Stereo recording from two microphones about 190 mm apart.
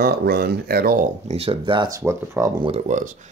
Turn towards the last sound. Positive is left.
turn(degrees=-40)  # may be behind; listen again after turning